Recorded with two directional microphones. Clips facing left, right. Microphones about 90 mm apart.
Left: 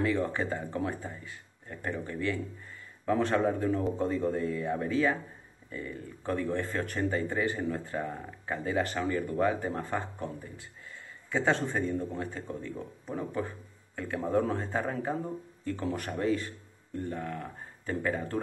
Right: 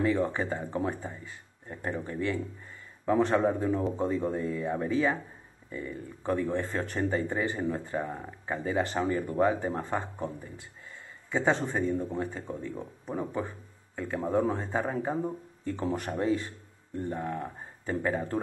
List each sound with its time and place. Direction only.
0.0 s speech: 20° right (ahead or behind)
0.4 s speech: 10° right (ahead or behind)
8.8 s speech: 20° right (ahead or behind)
11.2 s speech: 10° right (ahead or behind)
13.9 s speech: 5° right (ahead or behind); by 18.4 s 20° right (ahead or behind)